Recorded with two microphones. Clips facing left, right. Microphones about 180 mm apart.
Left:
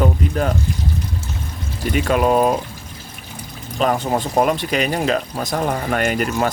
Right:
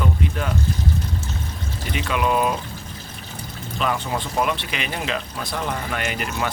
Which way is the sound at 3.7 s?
40° left (ahead or behind).